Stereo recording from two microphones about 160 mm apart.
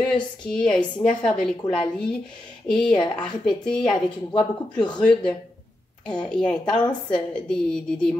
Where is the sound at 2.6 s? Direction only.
5° left (ahead or behind).